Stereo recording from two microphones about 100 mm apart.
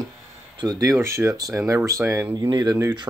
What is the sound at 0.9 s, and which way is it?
Speech, 25° right (ahead or behind).